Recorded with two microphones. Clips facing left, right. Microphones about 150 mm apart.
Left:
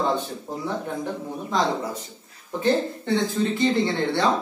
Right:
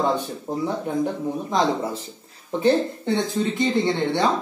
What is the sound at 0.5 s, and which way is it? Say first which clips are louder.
A man's voice: right 5 dB; 15° right (ahead or behind).